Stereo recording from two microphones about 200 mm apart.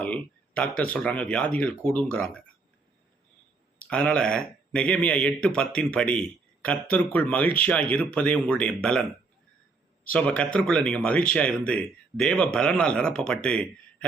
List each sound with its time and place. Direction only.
0.0 s a sound: 5° left (ahead or behind)
0.8 s speech: 5° left (ahead or behind)
3.8 s speech: 5° left (ahead or behind)
10.1 s speech: 5° left (ahead or behind)